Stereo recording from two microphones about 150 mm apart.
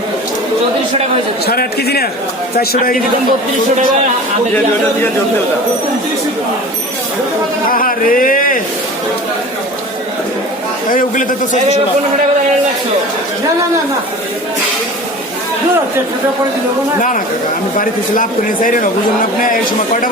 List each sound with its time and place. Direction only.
1.5 s a man's voice: 90° left
7.7 s speech: 70° left (ahead or behind)
10.9 s speech: 60° left (ahead or behind)
17.7 s speech: 65° left (ahead or behind)